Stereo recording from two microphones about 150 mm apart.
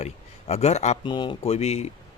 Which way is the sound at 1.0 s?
30° left (ahead or behind).